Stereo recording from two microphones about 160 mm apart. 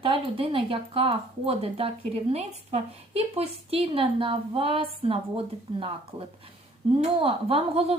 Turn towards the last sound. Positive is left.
turn(degrees=-35)  # may be behind; listen again after turning